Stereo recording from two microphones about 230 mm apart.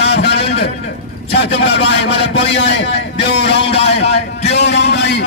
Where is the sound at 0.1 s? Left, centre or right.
Left.